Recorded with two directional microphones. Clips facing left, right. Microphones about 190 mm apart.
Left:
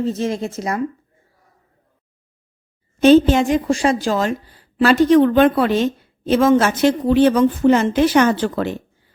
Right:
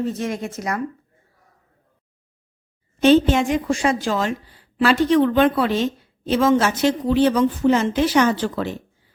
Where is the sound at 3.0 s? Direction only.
40° left (ahead or behind); by 8.7 s 55° left (ahead or behind).